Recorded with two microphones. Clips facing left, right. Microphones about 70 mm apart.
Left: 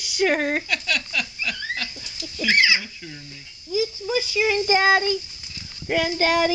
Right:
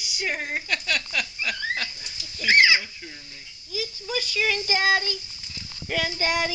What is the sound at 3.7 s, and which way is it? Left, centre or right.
Speech, left.